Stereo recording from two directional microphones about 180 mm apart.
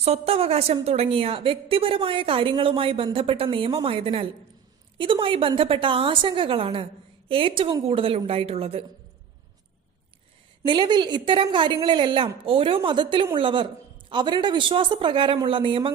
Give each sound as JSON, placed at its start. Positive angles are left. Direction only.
{"t": 0.0, "sound": "a woman's voice", "side_deg": -35}
{"t": 10.7, "sound": "a woman's voice", "side_deg": -25}